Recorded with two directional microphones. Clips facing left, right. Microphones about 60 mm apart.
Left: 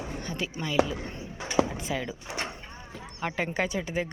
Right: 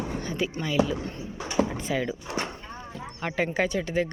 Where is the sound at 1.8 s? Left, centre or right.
Centre.